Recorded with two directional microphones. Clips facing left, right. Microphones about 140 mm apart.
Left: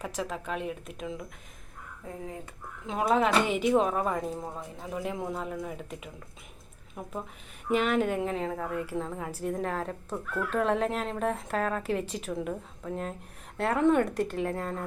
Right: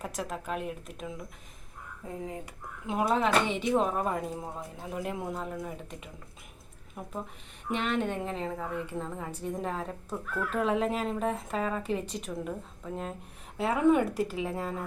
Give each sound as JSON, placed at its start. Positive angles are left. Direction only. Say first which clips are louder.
{"t": 0.0, "sound": "a woman's voice", "louder": "left 2 dB", "side_deg": 0}
{"t": 2.8, "sound": "a woman's voice", "louder": "left 2 dB", "side_deg": -5}